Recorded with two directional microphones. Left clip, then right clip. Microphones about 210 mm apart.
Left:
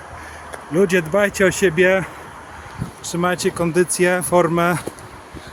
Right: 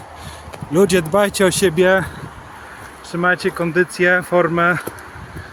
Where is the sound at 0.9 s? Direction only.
30° right (ahead or behind).